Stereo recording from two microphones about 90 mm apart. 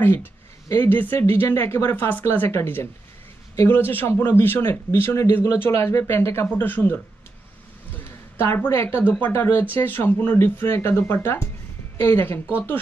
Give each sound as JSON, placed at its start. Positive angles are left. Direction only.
{"t": 0.0, "sound": "speech", "side_deg": 25}
{"t": 7.9, "sound": "a sound", "side_deg": 25}
{"t": 9.3, "sound": "speech", "side_deg": 25}